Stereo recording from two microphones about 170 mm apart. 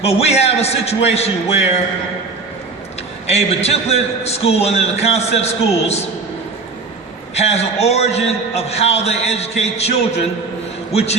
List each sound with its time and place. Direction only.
0.0 s a man's voice: 35° left (ahead or behind)
3.2 s a man's voice: 40° left (ahead or behind)
7.3 s a man's voice: 40° left (ahead or behind)